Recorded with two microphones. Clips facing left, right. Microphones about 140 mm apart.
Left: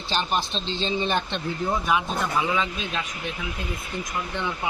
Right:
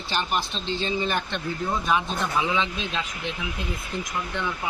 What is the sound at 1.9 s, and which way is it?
Speech, 10° left (ahead or behind).